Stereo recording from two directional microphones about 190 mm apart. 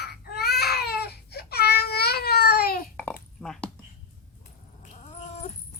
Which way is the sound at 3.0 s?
5° left (ahead or behind).